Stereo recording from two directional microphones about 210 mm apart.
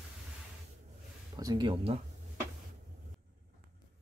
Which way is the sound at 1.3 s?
20° right (ahead or behind).